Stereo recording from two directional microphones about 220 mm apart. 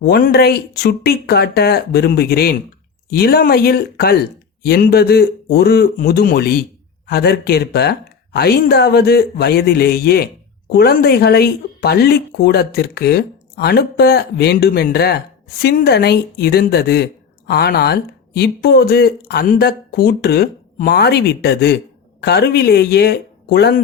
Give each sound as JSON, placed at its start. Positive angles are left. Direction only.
{"t": 0.0, "sound": "speech", "side_deg": 45}